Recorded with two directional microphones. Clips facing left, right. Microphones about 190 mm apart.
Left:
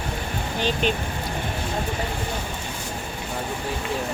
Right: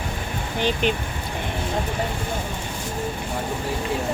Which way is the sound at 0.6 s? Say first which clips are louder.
Right 2 dB; 15° right (ahead or behind).